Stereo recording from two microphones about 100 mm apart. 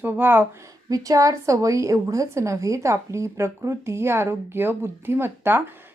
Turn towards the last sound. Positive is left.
turn(degrees=-20)  # may be behind; listen again after turning